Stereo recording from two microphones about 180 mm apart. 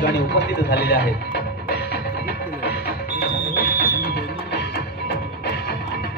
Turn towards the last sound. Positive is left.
turn(degrees=60)  # may be behind; listen again after turning